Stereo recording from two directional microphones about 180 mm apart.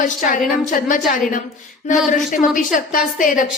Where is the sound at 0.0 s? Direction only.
50° left (ahead or behind).